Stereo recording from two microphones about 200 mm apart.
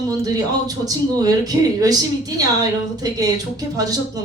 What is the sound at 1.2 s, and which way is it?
Speech, 20° right (ahead or behind).